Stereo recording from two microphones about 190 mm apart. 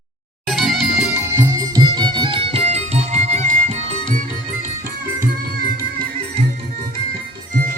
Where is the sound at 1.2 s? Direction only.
15° right (ahead or behind); by 3.7 s 35° right (ahead or behind).